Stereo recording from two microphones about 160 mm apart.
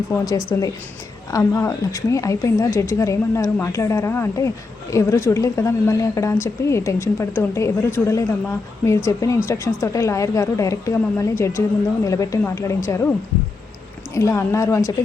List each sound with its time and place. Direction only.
0.1 s a woman's voice: 20° left (ahead or behind)
14.1 s a woman's voice: 20° left (ahead or behind)